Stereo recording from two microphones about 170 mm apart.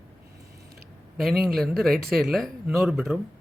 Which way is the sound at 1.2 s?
Centre (ahead or behind).